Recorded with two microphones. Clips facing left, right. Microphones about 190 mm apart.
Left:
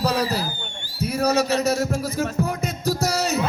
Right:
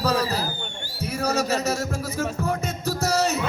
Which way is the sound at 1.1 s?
35° left (ahead or behind).